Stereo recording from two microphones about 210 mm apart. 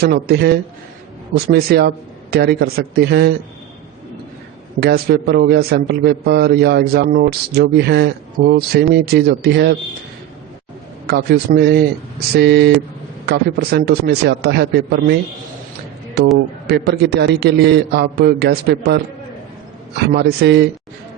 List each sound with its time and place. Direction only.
0.0 s a man's voice: 50° right (ahead or behind)
4.8 s a man's voice: 50° right (ahead or behind)
11.0 s a man's voice: 50° right (ahead or behind)
16.6 s a man's voice: 50° right (ahead or behind)
20.1 s a man's voice: 50° right (ahead or behind)